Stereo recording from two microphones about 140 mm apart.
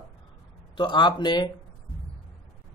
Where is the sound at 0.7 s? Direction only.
35° left (ahead or behind).